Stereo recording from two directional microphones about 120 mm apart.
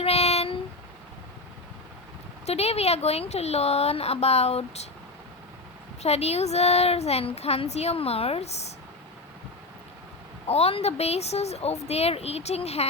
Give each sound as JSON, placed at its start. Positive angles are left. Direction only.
{"t": 0.0, "sound": "a sound", "side_deg": 60}
{"t": 2.5, "sound": "speech", "side_deg": 60}
{"t": 6.0, "sound": "speech", "side_deg": 60}
{"t": 10.4, "sound": "speech", "side_deg": 60}